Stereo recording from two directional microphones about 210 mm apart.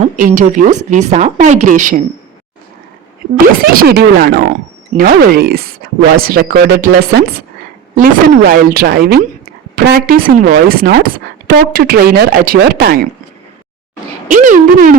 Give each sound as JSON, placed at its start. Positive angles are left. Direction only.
{"t": 0.0, "sound": "speech", "side_deg": -40}
{"t": 3.4, "sound": "speech", "side_deg": -45}
{"t": 14.3, "sound": "speech", "side_deg": -40}